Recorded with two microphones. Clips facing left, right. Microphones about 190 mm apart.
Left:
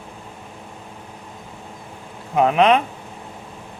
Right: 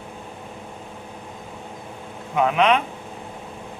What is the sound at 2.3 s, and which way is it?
Speech, 35° left (ahead or behind).